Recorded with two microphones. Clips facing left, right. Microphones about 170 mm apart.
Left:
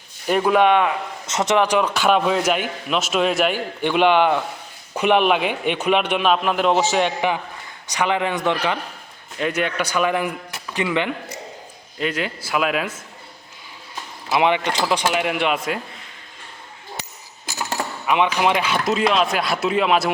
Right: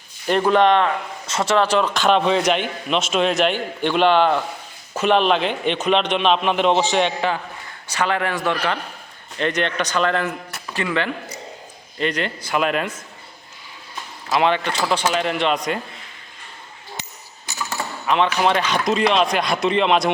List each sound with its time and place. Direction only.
0.3 s a man's voice: 5° left (ahead or behind)
1.3 s a man's voice: 20° left (ahead or behind); by 6.8 s 5° left (ahead or behind)
7.2 s a man's voice: 15° left (ahead or behind)
9.4 s a man's voice: 5° left (ahead or behind)
11.9 s speech: 5° left (ahead or behind)
14.3 s a man's voice: 15° left (ahead or behind)
18.0 s speech: 10° left (ahead or behind)